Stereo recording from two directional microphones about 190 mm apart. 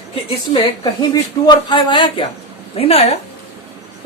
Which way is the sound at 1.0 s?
25° left (ahead or behind).